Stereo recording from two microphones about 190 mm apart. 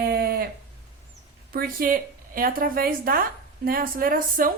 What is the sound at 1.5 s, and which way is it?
A woman's voice, 50° right (ahead or behind).